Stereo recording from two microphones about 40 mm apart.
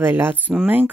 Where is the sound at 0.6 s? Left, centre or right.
Right.